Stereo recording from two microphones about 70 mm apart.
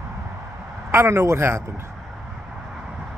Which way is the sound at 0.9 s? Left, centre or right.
Right.